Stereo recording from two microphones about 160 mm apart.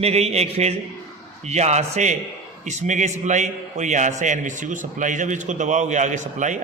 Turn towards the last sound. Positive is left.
turn(degrees=-50)  # may be behind; listen again after turning